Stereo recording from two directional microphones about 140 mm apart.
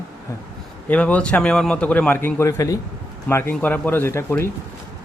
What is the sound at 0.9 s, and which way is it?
A man's voice, 10° left (ahead or behind).